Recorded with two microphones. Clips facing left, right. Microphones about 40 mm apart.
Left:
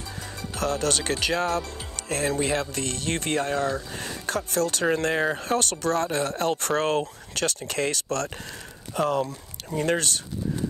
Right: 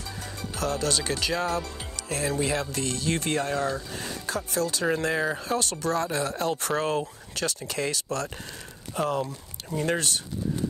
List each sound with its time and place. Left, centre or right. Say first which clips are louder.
0.6 s speech: left 2 dB; left
9.9 s speech: left 1 dB; left